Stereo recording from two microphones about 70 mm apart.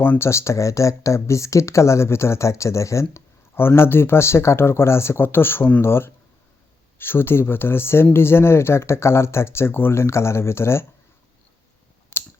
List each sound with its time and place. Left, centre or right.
0.0 s speech: left